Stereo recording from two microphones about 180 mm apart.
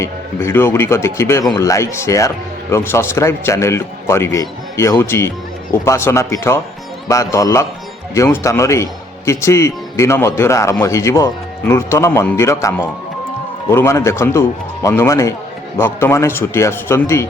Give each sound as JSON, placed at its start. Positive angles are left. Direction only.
{"t": 0.0, "sound": "a man's voice", "side_deg": 15}